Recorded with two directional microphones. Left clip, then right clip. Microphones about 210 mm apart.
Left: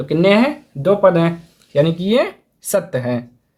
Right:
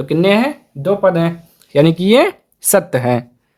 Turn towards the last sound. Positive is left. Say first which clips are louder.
# right 5 dB
turn(degrees=-45)  # may be behind; listen again after turning